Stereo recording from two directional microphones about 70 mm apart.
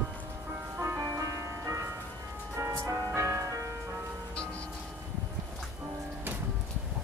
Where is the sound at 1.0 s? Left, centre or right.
Right.